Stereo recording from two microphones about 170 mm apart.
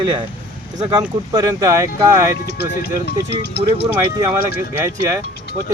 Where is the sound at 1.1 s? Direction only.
20° right (ahead or behind).